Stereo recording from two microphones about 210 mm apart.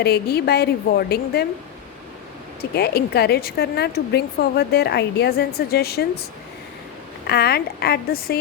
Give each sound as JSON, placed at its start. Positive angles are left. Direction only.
{"t": 0.0, "sound": "speech", "side_deg": 50}
{"t": 2.6, "sound": "speech", "side_deg": 50}
{"t": 7.3, "sound": "speech", "side_deg": 50}